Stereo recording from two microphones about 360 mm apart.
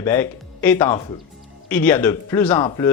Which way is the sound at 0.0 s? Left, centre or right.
Centre.